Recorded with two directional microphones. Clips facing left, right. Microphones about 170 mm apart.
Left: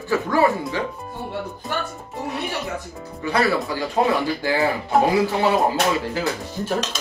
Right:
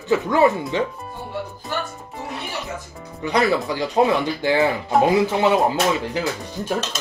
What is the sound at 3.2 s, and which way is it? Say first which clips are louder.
Speech: right 1 dB; 20° right (ahead or behind).